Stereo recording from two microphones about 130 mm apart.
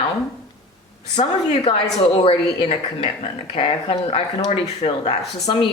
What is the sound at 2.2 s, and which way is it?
Speech, 45° left (ahead or behind).